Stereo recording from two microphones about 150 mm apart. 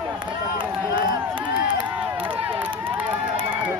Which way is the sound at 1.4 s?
10° right (ahead or behind).